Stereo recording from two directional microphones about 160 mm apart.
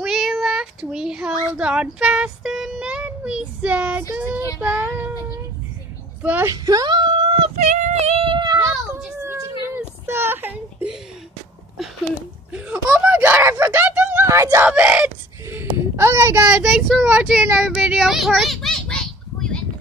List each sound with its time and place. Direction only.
0.0 s child singing: centre (ahead or behind)
4.1 s speech: 10° right (ahead or behind)
4.6 s child singing: 10° right (ahead or behind)
6.2 s speech: 10° right (ahead or behind)
6.5 s a sound: 25° right (ahead or behind)
7.6 s speech: 45° right (ahead or behind)
8.5 s children playing: 15° right (ahead or behind)
9.8 s a sound: 15° right (ahead or behind)
12.5 s a sound: 10° right (ahead or behind)
14.7 s speech: 10° right (ahead or behind); by 19.6 s 5° left (ahead or behind)